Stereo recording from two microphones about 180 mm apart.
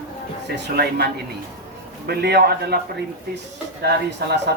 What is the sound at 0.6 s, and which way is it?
Speech, 65° right (ahead or behind).